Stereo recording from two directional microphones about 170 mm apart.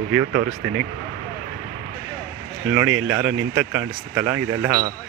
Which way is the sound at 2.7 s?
10° right (ahead or behind).